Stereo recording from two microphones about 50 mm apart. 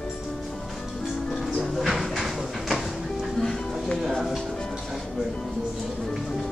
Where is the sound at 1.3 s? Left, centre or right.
Centre.